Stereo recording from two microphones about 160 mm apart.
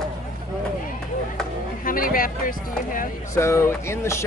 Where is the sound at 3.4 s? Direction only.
15° left (ahead or behind).